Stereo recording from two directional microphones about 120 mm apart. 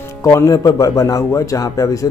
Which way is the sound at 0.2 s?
25° left (ahead or behind).